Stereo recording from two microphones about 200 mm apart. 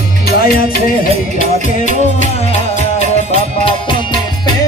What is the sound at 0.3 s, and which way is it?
Music, 50° left (ahead or behind).